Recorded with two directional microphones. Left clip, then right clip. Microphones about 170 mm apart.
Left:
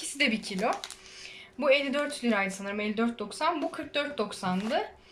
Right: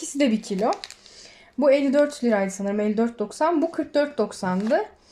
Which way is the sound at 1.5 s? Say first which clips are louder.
Right 7 dB; 30° right (ahead or behind).